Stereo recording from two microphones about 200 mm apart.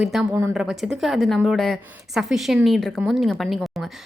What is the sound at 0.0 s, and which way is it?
A woman's voice, centre (ahead or behind).